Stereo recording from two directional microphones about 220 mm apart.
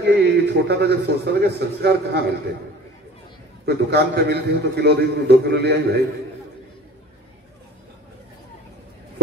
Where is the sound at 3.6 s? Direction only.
45° right (ahead or behind).